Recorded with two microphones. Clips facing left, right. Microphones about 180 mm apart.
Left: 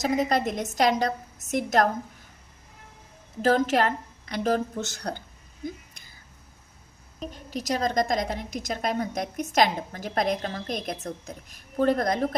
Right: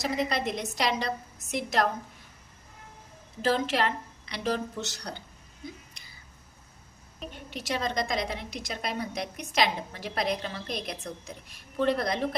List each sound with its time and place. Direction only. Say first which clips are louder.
0.0 s a woman's voice: left 5 dB; 45° left (ahead or behind)
3.4 s a woman's voice: left 4 dB; 45° left (ahead or behind)
7.2 s a woman's voice: left 5 dB; 40° left (ahead or behind)